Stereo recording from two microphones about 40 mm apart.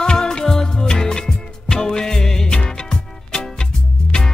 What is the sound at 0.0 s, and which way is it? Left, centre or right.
Music, centre.